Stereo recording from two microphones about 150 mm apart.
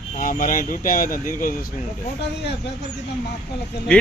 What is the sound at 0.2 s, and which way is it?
Speech, 65° left (ahead or behind).